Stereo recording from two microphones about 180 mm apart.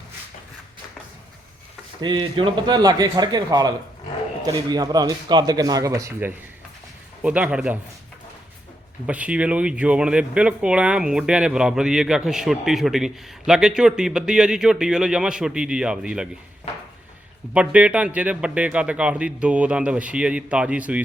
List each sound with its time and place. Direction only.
2.0 s a man's voice: 25° right (ahead or behind); by 7.8 s 5° right (ahead or behind)
9.0 s speech: 5° right (ahead or behind)
17.5 s a man's voice: 5° right (ahead or behind)